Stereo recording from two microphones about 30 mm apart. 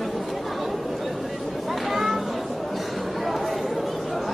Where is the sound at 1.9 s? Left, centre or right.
Centre.